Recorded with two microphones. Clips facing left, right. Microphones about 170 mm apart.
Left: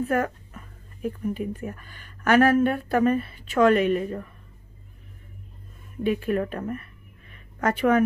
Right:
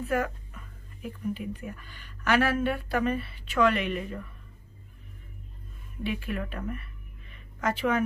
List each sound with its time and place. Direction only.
0.0 s speech: 50° left (ahead or behind)
6.0 s speech: 45° left (ahead or behind)